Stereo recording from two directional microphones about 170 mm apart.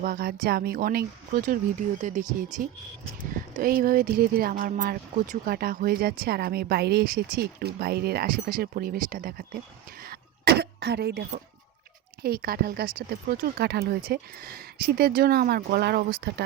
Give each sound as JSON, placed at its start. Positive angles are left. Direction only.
{"t": 0.0, "sound": "speech", "side_deg": -60}
{"t": 3.6, "sound": "speech", "side_deg": -60}
{"t": 10.0, "sound": "throat clearing", "side_deg": -65}
{"t": 12.2, "sound": "speech", "side_deg": -60}